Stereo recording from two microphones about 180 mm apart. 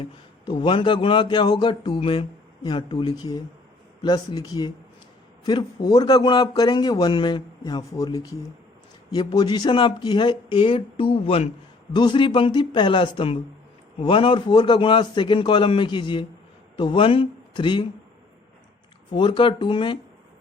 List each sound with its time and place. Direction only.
0.0 s speech: 25° left (ahead or behind)
19.1 s speech: 25° left (ahead or behind)